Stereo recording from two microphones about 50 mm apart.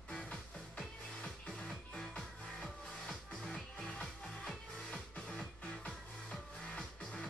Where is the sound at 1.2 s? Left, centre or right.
Centre.